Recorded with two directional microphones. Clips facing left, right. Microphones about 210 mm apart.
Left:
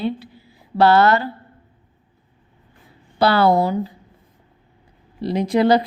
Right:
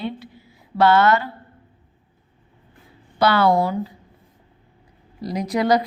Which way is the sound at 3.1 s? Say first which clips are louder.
Left 2 dB; 30° left (ahead or behind).